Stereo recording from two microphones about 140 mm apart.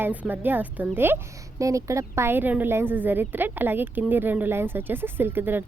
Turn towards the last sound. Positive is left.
turn(degrees=-15)  # may be behind; listen again after turning